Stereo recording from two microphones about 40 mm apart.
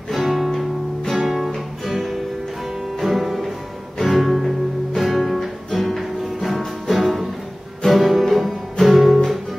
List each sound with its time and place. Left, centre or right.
0.2 s music: centre
0.5 s music: centre
1.1 s music: centre